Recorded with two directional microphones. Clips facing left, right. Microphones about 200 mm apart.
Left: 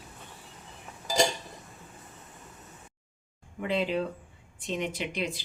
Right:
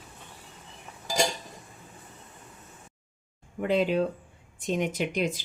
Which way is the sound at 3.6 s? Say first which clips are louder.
Right 5 dB; 45° right (ahead or behind).